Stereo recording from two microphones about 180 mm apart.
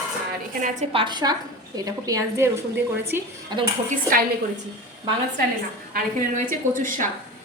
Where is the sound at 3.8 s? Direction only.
50° right (ahead or behind).